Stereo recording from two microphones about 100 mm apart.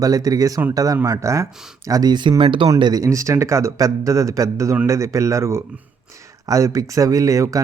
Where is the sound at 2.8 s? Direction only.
35° right (ahead or behind).